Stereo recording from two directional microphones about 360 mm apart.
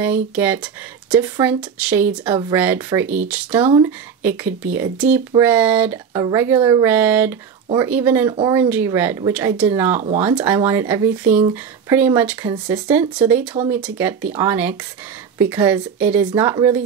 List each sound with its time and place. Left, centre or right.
0.0 s speech: centre
9.9 s speech: centre
10.2 s speech: centre